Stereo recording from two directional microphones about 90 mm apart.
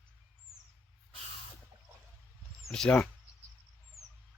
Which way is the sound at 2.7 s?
5° left (ahead or behind).